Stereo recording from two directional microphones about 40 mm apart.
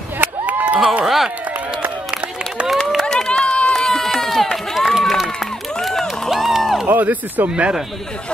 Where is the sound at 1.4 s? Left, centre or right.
Right.